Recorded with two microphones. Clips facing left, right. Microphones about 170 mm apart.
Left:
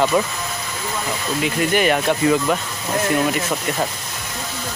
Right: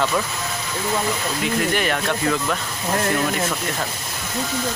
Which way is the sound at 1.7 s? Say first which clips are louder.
Left 4 dB; 10° left (ahead or behind).